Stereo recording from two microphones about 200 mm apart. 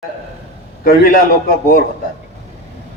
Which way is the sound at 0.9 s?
45° left (ahead or behind).